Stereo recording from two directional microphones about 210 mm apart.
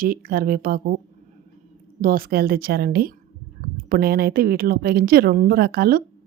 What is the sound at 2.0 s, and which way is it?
A woman's voice, 45° right (ahead or behind).